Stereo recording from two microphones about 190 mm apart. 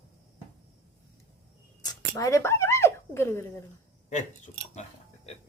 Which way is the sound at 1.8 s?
20° left (ahead or behind).